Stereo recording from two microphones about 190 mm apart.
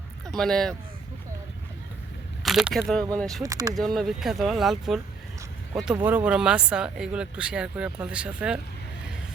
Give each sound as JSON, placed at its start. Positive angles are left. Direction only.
{"t": 0.3, "sound": "speech", "side_deg": 5}
{"t": 2.4, "sound": "speech", "side_deg": 0}
{"t": 3.4, "sound": "speech", "side_deg": -20}
{"t": 3.8, "sound": "speech", "side_deg": 0}